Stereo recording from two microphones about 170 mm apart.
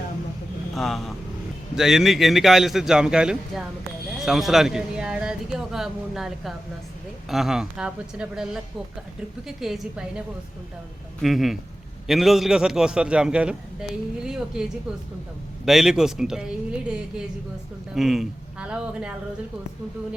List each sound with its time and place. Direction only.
0.7 s speech: centre (ahead or behind)